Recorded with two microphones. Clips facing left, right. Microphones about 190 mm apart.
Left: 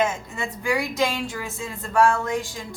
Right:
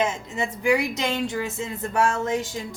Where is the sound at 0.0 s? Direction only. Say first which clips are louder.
Even; 20° right (ahead or behind).